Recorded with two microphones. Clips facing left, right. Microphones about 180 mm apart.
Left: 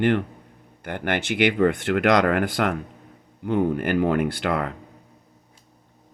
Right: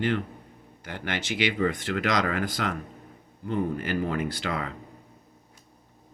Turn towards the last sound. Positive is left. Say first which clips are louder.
# left 6 dB
turn(degrees=60)  # may be behind; listen again after turning